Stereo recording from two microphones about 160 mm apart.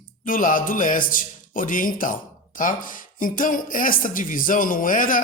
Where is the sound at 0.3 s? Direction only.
55° left (ahead or behind).